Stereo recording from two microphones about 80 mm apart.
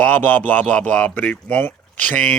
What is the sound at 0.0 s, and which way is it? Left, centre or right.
Speech, left.